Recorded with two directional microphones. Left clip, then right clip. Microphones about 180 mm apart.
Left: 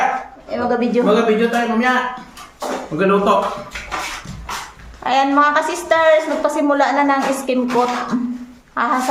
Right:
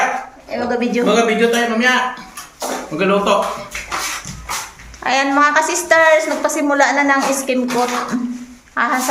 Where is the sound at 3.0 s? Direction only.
60° left (ahead or behind).